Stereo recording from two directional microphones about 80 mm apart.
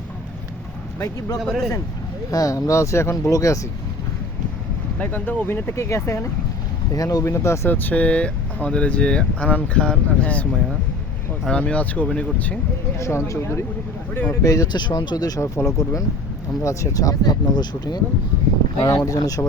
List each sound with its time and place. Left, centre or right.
0.9 s speech: left
1.4 s speech: centre
2.3 s speech: left
4.9 s speech: left
6.9 s speech: left
7.7 s speech: left
13.0 s speech: left
14.1 s speech: left
14.4 s speech: left
14.7 s speech: left
15.6 s speech: left
16.6 s speech: left
19.0 s speech: left